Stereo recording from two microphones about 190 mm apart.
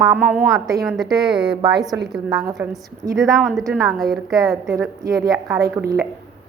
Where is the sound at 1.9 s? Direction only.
15° right (ahead or behind).